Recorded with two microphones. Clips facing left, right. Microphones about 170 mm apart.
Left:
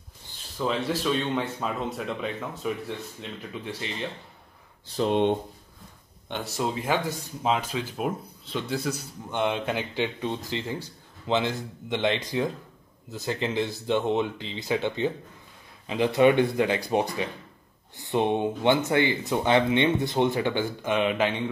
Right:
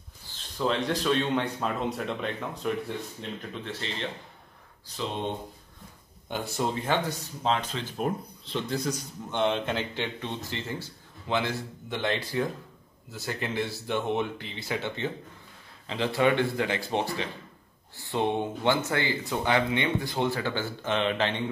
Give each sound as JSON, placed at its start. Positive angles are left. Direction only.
{"t": 0.6, "sound": "speech", "side_deg": 5}
{"t": 6.3, "sound": "speech", "side_deg": 0}